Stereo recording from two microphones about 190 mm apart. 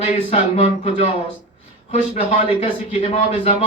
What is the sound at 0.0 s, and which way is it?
Speech, 35° left (ahead or behind).